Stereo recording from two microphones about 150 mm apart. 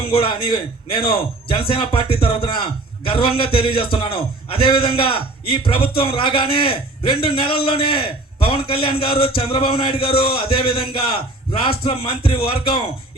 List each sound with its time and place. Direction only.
0.0 s a man's voice: 40° left (ahead or behind)